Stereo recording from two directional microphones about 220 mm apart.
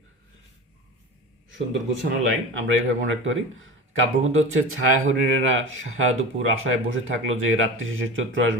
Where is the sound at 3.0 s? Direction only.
60° right (ahead or behind).